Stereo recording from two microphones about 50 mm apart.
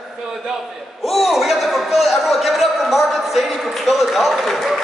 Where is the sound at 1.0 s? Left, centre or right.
Centre.